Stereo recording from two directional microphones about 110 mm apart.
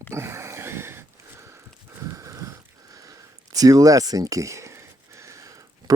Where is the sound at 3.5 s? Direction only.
30° right (ahead or behind).